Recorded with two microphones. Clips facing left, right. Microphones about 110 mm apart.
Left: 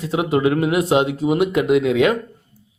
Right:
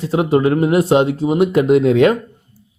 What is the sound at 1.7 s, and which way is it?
Speech, 35° right (ahead or behind).